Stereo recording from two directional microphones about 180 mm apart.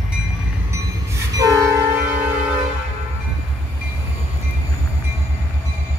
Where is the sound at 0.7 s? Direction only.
15° right (ahead or behind).